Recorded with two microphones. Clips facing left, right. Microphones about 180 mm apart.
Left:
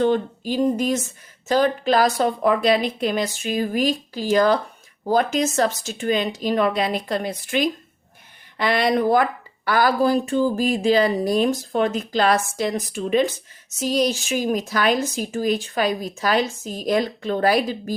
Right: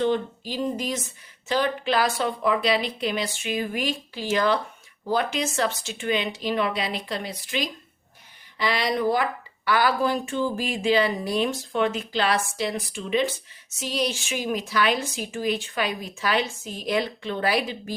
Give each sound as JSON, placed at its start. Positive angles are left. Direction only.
{"t": 0.0, "sound": "a woman's voice", "side_deg": 50}